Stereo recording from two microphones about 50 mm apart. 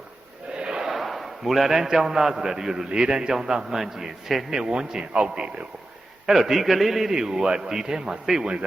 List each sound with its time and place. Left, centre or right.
0.5 s a sound: centre
0.9 s a man's voice: centre
6.2 s a man's voice: centre